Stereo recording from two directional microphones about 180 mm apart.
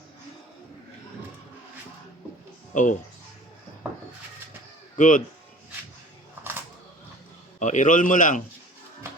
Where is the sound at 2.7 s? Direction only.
45° left (ahead or behind).